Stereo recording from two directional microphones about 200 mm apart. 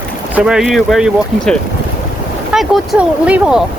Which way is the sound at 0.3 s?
5° right (ahead or behind).